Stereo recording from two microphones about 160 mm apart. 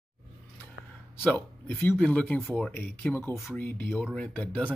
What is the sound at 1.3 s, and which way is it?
Speech, 10° left (ahead or behind).